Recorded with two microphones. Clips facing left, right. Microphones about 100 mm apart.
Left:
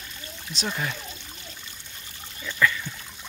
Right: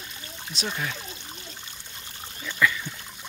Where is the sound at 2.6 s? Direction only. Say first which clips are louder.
Even; 15° right (ahead or behind).